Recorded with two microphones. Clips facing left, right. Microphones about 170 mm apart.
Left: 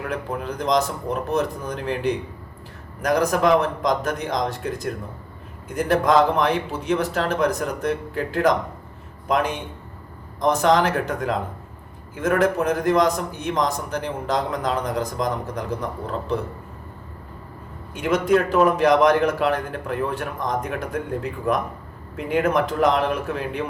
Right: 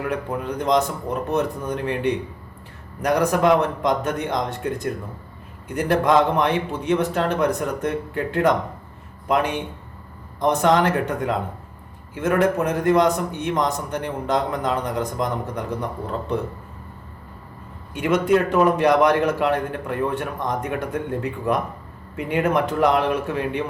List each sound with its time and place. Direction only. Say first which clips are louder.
0.1 s a man's voice: right 2 dB; centre (ahead or behind)
17.9 s a man's voice: right 1 dB; centre (ahead or behind)